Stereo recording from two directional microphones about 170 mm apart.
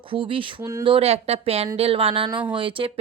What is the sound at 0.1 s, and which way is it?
Speech, 30° right (ahead or behind).